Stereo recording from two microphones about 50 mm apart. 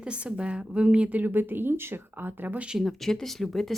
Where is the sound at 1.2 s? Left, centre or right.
Right.